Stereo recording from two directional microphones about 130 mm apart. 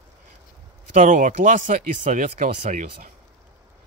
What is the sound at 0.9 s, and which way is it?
Speech, 90° right.